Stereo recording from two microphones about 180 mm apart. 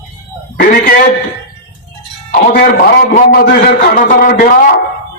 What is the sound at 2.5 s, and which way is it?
A man's voice, 50° left (ahead or behind).